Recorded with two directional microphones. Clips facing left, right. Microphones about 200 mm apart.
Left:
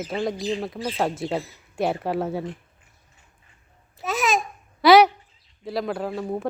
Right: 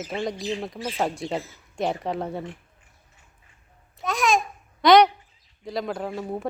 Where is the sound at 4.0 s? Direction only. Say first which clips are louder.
Right 1 dB; 5° left (ahead or behind).